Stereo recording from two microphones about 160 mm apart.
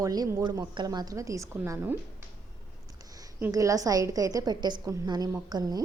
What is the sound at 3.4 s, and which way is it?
A woman's voice, 20° right (ahead or behind).